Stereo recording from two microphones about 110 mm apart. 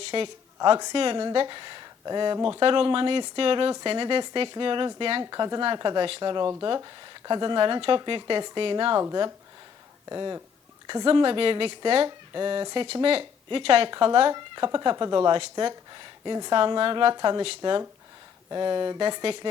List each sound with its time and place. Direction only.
0.0 s speech: 50° right (ahead or behind)
5.2 s speech: 35° right (ahead or behind)
6.4 s speech: 30° right (ahead or behind); by 9.0 s 50° right (ahead or behind)
10.1 s speech: 35° right (ahead or behind)
10.8 s speech: 50° right (ahead or behind)
12.0 s speech: 40° right (ahead or behind); by 13.9 s 60° right (ahead or behind)
13.9 s speech: 50° right (ahead or behind)
15.3 s speech: 50° right (ahead or behind)